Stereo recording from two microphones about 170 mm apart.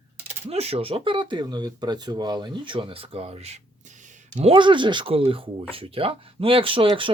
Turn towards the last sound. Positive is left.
turn(degrees=-30)  # may be behind; listen again after turning